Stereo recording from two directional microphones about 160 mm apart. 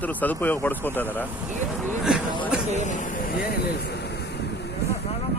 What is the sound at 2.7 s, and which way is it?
Speech, 50° left (ahead or behind).